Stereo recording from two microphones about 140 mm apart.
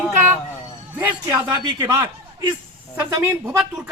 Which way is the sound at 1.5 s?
35° right (ahead or behind).